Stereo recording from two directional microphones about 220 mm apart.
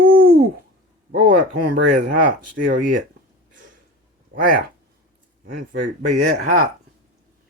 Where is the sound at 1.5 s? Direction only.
90° right.